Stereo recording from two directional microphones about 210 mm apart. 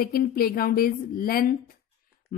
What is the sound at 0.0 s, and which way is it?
A woman's voice, 45° left (ahead or behind).